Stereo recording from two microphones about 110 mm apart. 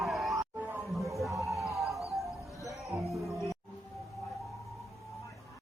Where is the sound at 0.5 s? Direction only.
15° right (ahead or behind).